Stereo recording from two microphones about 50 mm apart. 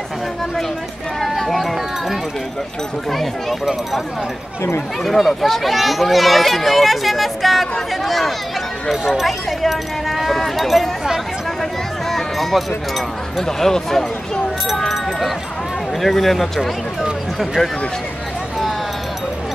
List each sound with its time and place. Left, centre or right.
1.2 s speech: centre
5.0 s speech: centre
12.1 s speech: centre